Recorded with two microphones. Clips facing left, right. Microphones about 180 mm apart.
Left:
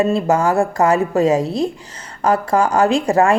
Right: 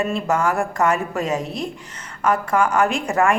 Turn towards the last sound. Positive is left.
turn(degrees=35)  # may be behind; listen again after turning